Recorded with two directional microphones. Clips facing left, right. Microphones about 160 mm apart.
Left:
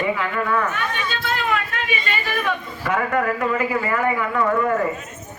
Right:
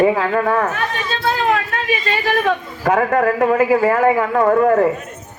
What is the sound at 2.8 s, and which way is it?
Speech, 45° right (ahead or behind).